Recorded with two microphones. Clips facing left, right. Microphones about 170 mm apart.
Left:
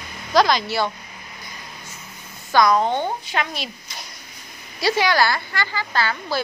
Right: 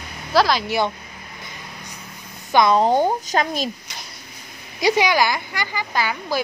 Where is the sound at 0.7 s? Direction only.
20° right (ahead or behind).